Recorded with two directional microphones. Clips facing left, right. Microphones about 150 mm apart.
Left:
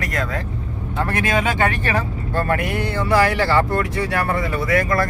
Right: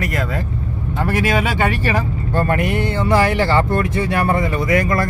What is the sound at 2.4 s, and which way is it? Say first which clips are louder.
Speech: right 3 dB; 20° right (ahead or behind).